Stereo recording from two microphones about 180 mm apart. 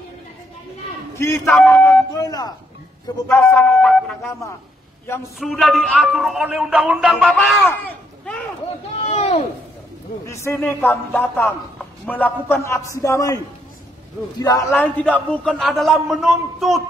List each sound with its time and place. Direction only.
1.1 s a man's voice: 15° left (ahead or behind)
1.5 s speech: 5° left (ahead or behind); by 2.5 s 20° left (ahead or behind)
3.3 s a man's voice: 10° left (ahead or behind)
5.4 s a man's voice: centre (ahead or behind)
8.9 s a sound: 35° left (ahead or behind)
10.2 s a man's voice: 15° left (ahead or behind)
14.4 s a man's voice: 20° left (ahead or behind); by 16.8 s centre (ahead or behind)